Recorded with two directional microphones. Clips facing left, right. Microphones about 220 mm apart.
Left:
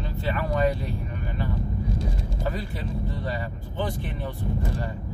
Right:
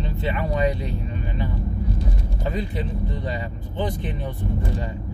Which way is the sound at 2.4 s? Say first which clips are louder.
Right 4 dB; 20° right (ahead or behind).